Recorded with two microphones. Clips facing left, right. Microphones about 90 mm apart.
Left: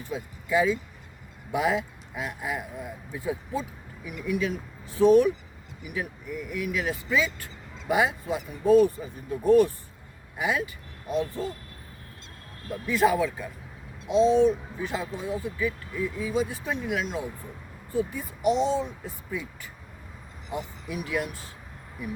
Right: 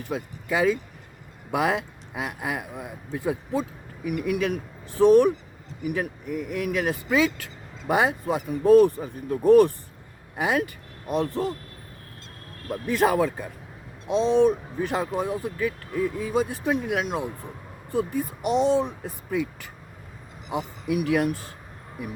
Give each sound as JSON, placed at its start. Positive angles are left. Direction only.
{"t": 0.0, "sound": "speech", "side_deg": -70}
{"t": 7.8, "sound": "speech", "side_deg": -45}
{"t": 12.9, "sound": "speech", "side_deg": -55}